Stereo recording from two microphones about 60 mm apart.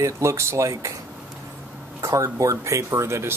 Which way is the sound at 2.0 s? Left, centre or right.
Right.